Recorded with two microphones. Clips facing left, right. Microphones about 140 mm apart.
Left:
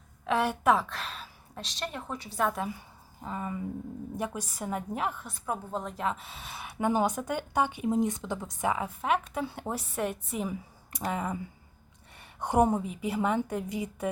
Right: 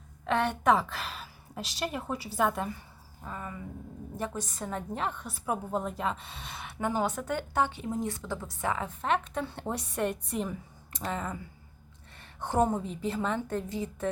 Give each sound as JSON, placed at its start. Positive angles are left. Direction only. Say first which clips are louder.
{"t": 0.3, "sound": "a woman's voice", "louder": "even", "side_deg": 5}
{"t": 3.2, "sound": "a woman's voice", "louder": "left 5 dB", "side_deg": 15}